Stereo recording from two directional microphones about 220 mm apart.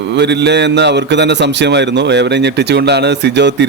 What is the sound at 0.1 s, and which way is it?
A man's voice, 50° right (ahead or behind).